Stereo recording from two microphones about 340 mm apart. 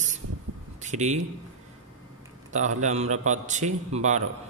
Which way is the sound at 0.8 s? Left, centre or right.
Right.